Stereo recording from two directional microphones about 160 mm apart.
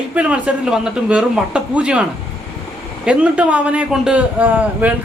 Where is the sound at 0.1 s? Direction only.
10° right (ahead or behind).